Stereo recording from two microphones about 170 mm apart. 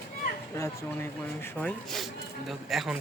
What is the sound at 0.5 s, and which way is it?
Speech, 15° left (ahead or behind).